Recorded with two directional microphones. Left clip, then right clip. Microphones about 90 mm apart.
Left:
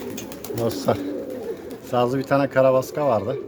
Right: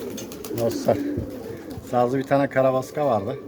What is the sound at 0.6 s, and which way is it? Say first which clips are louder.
Speech: right 1 dB; 35° left (ahead or behind).